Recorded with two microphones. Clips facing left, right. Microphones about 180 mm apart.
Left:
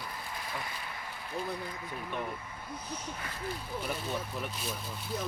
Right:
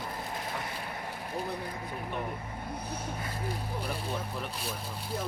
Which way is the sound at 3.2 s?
35° right (ahead or behind).